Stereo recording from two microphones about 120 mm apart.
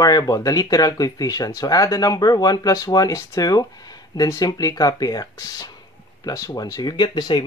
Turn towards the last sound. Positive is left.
turn(degrees=40)  # may be behind; listen again after turning